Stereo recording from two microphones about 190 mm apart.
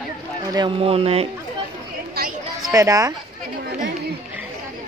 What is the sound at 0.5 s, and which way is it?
Speech, 25° right (ahead or behind).